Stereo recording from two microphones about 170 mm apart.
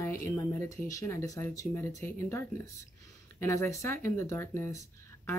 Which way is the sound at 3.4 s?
15° left (ahead or behind).